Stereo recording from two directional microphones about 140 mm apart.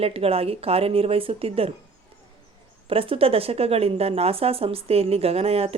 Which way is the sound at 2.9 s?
40° right (ahead or behind).